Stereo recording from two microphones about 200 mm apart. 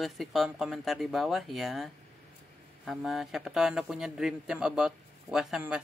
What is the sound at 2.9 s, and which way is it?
Speech, centre (ahead or behind).